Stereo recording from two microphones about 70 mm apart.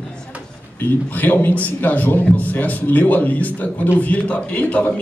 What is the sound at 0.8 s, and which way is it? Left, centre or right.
A man's voice, left.